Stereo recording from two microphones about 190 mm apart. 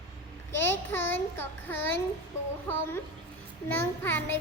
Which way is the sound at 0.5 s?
10° left (ahead or behind).